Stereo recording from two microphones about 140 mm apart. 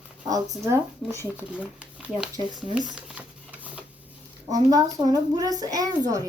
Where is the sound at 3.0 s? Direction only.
10° right (ahead or behind).